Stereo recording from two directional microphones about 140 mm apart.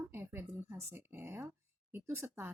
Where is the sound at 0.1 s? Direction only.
15° right (ahead or behind).